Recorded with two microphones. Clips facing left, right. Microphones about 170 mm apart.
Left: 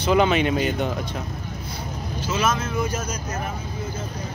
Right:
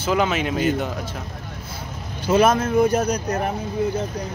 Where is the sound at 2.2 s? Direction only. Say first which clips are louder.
Right 7 dB; 55° right (ahead or behind).